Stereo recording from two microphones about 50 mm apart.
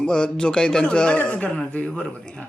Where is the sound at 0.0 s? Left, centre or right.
Centre.